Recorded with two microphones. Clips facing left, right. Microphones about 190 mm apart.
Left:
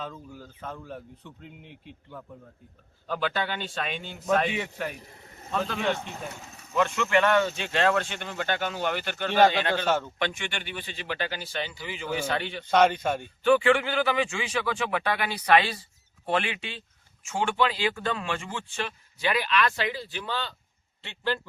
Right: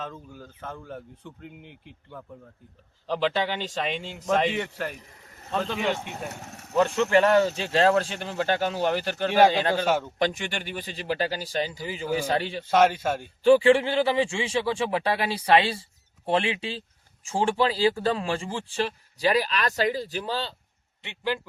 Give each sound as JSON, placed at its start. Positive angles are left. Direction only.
{"t": 0.0, "sound": "speech", "side_deg": 0}
{"t": 3.1, "sound": "speech", "side_deg": -25}
{"t": 4.5, "sound": "speech", "side_deg": 5}
{"t": 6.7, "sound": "speech", "side_deg": -35}
{"t": 9.8, "sound": "speech", "side_deg": -10}
{"t": 10.2, "sound": "speech", "side_deg": -35}
{"t": 12.7, "sound": "speech", "side_deg": -5}
{"t": 13.4, "sound": "speech", "side_deg": -30}
{"t": 21.0, "sound": "speech", "side_deg": -15}